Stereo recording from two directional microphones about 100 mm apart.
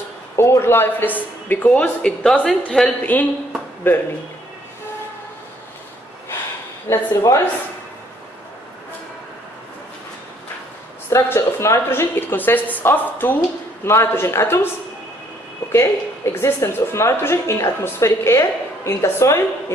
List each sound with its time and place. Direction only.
0.4 s a woman's voice: 25° left (ahead or behind)
6.9 s a woman's voice: 30° left (ahead or behind)
11.1 s a woman's voice: 25° left (ahead or behind)
15.7 s a woman's voice: 25° left (ahead or behind)